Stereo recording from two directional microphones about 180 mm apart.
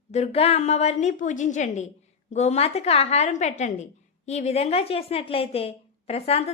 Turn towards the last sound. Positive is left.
turn(degrees=35)  # may be behind; listen again after turning